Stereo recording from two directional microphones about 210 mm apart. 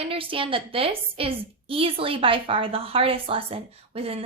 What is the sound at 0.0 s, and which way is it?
A woman's voice, 25° right (ahead or behind).